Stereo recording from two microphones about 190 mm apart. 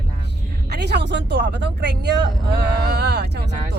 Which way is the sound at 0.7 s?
60° right (ahead or behind).